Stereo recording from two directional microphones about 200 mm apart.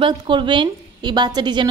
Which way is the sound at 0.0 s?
25° right (ahead or behind).